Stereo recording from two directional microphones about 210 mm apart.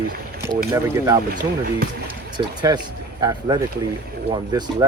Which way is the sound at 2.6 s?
20° right (ahead or behind).